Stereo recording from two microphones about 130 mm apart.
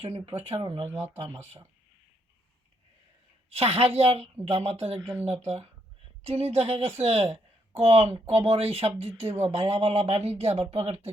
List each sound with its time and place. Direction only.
0.0 s speech: 55° right (ahead or behind)
0.6 s speech: 40° right (ahead or behind)
0.9 s speech: 20° right (ahead or behind)
3.5 s speech: 50° right (ahead or behind)